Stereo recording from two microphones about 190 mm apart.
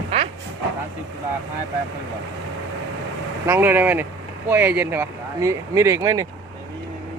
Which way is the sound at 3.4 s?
10° right (ahead or behind).